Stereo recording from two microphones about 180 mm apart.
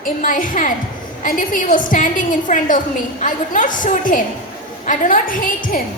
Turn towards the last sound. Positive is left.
turn(degrees=50)  # may be behind; listen again after turning